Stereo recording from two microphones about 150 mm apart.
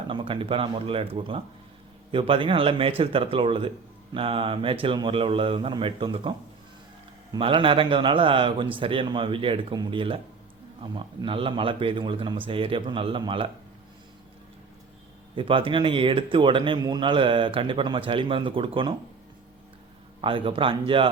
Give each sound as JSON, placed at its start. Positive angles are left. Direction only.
{"t": 0.1, "sound": "speech", "side_deg": -35}
{"t": 7.3, "sound": "speech", "side_deg": -35}
{"t": 15.4, "sound": "speech", "side_deg": -35}
{"t": 20.2, "sound": "speech", "side_deg": -35}